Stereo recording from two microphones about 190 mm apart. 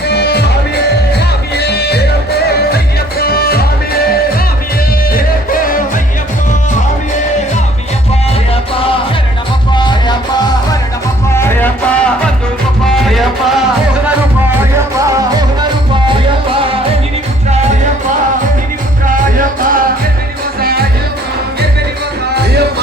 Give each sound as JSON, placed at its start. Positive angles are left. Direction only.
{"t": 0.1, "sound": "music", "side_deg": 60}
{"t": 1.5, "sound": "music", "side_deg": 60}
{"t": 3.2, "sound": "music", "side_deg": 55}
{"t": 5.1, "sound": "music", "side_deg": 45}
{"t": 9.7, "sound": "music", "side_deg": 25}
{"t": 11.3, "sound": "music", "side_deg": 10}
{"t": 19.0, "sound": "music", "side_deg": -45}